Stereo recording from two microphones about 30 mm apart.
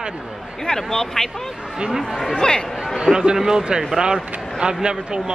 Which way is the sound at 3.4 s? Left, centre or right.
Centre.